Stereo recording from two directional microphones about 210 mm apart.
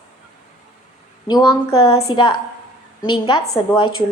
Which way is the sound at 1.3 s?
25° left (ahead or behind).